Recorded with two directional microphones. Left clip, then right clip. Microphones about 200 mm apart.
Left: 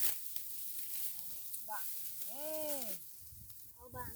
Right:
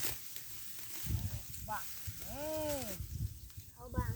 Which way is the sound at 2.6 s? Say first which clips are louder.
Right 4 dB; 35° left (ahead or behind).